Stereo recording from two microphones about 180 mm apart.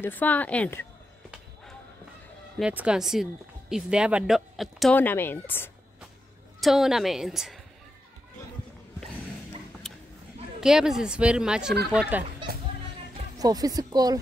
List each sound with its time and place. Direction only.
0.0 s a woman's voice: 10° left (ahead or behind)
1.3 s basketball bounce: 5° left (ahead or behind)
2.6 s speech: 5° right (ahead or behind); by 5.7 s 10° left (ahead or behind)
6.6 s speech: centre (ahead or behind)
10.6 s speech: 5° right (ahead or behind)
13.4 s speech: 20° right (ahead or behind)